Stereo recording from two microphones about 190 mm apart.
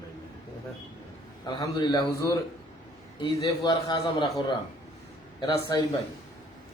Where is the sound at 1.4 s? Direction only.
20° left (ahead or behind).